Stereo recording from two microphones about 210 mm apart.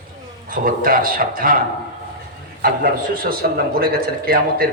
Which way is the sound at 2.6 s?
45° right (ahead or behind).